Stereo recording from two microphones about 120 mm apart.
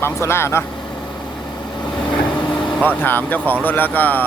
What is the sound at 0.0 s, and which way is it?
Speech, 20° left (ahead or behind).